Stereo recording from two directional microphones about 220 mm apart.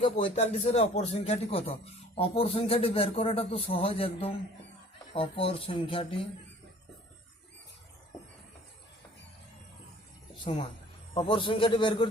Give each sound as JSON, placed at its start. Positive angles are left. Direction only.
{"t": 0.0, "sound": "speech", "side_deg": 25}
{"t": 10.4, "sound": "speech", "side_deg": 20}